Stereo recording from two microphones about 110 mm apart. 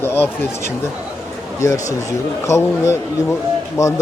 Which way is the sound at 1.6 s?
30° left (ahead or behind).